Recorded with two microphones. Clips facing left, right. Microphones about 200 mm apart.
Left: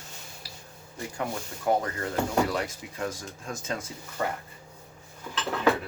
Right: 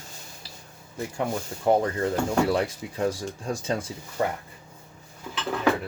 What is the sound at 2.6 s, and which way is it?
Speech, 30° right (ahead or behind).